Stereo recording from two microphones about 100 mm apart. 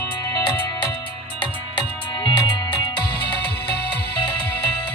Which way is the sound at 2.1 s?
45° left (ahead or behind).